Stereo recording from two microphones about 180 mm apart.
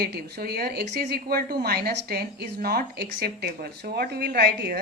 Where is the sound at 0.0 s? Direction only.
60° right (ahead or behind).